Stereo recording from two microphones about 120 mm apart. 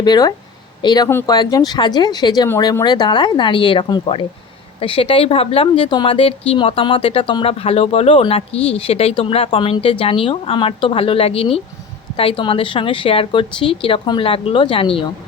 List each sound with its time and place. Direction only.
0.0 s a woman's voice: 35° left (ahead or behind)